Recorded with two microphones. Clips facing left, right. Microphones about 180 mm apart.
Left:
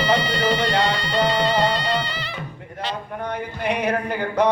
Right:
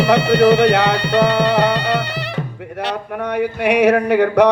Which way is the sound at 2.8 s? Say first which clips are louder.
Right 5 dB; 70° right (ahead or behind).